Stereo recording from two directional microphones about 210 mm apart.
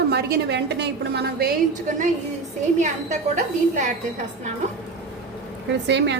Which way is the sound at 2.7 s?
35° right (ahead or behind).